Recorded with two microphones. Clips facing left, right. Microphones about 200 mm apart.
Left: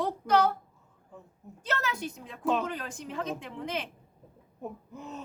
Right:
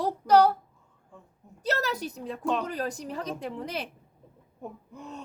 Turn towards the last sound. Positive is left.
turn(degrees=0)  # may be behind; listen again after turning